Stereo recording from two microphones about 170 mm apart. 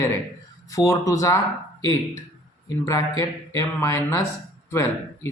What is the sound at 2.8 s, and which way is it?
Speech, 20° left (ahead or behind).